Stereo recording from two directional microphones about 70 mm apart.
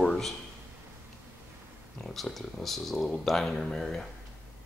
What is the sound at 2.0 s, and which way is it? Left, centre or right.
A man's voice, centre.